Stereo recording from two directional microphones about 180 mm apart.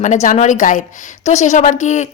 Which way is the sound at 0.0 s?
40° left (ahead or behind).